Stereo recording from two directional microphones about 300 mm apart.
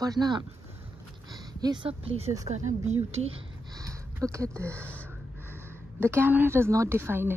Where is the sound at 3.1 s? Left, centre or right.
Centre.